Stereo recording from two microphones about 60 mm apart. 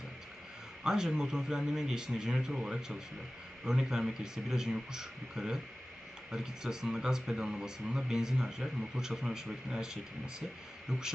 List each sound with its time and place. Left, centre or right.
0.9 s speech: centre